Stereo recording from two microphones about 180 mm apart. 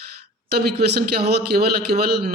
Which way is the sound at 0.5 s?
65° right (ahead or behind).